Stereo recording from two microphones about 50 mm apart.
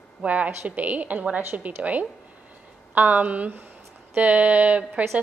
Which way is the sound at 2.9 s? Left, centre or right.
Right.